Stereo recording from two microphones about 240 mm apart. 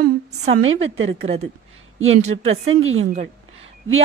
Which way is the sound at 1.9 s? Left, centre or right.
Right.